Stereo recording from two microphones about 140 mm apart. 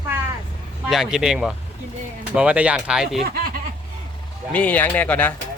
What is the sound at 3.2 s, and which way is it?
Snicker, 90° right.